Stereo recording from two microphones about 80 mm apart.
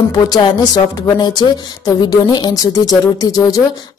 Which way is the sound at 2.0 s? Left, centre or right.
Left.